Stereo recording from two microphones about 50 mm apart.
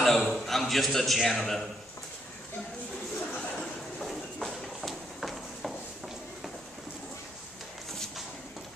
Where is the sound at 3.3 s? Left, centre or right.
Left.